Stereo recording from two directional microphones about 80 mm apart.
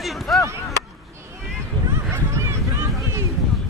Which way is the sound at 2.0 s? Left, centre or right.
Right.